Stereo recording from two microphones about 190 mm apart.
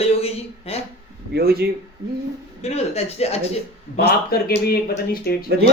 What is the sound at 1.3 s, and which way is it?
Speech, 55° right (ahead or behind).